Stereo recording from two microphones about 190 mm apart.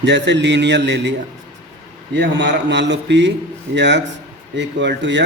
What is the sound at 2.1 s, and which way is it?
A man's voice, 65° right (ahead or behind).